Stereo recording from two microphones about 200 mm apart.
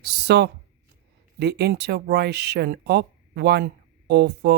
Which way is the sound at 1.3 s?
55° right (ahead or behind).